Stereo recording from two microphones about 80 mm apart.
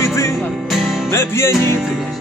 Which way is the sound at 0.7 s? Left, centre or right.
Centre.